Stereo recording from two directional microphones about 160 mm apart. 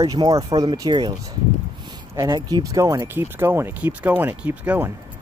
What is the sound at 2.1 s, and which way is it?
Speech, 25° right (ahead or behind).